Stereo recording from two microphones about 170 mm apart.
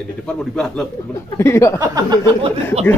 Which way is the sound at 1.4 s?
15° left (ahead or behind).